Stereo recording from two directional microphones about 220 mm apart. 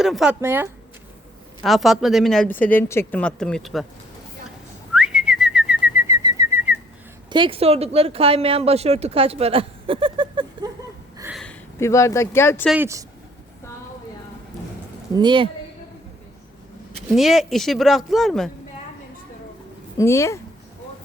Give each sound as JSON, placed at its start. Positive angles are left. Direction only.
{"t": 0.0, "sound": "speech", "side_deg": 0}
{"t": 4.9, "sound": "whistling", "side_deg": -5}
{"t": 7.3, "sound": "speech", "side_deg": -20}
{"t": 11.3, "sound": "speech", "side_deg": 10}
{"t": 12.7, "sound": "speech", "side_deg": -10}
{"t": 15.1, "sound": "a woman's voice", "side_deg": -20}
{"t": 17.2, "sound": "speech", "side_deg": 0}
{"t": 20.0, "sound": "speech", "side_deg": 15}